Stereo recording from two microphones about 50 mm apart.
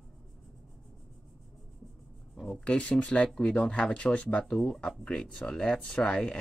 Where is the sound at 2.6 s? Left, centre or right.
Left.